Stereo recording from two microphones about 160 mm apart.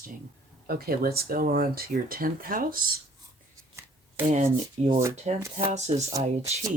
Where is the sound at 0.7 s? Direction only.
70° right (ahead or behind).